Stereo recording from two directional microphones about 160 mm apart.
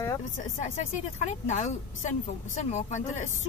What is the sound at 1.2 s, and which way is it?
Speech, 50° left (ahead or behind).